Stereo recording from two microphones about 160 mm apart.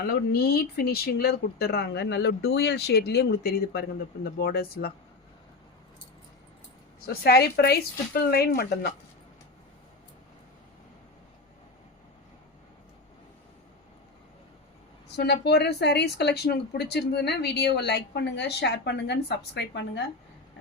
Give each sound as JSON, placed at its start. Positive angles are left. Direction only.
{"t": 0.0, "sound": "speech", "side_deg": 75}
{"t": 7.1, "sound": "speech", "side_deg": 80}
{"t": 15.1, "sound": "speech", "side_deg": 90}